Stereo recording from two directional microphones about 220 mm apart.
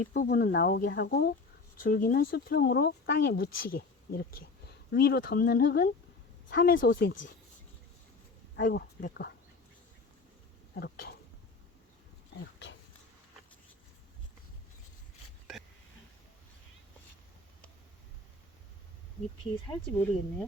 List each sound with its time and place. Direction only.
0.0 s speech: 40° left (ahead or behind)
6.9 s speech: 55° left (ahead or behind)
8.5 s speech: 40° left (ahead or behind)
10.8 s speech: 45° left (ahead or behind)
19.7 s speech: 10° left (ahead or behind)